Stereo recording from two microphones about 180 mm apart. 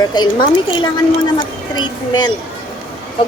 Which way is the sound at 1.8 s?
25° left (ahead or behind).